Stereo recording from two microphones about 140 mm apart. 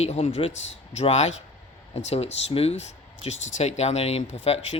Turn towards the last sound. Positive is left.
turn(degrees=45)  # may be behind; listen again after turning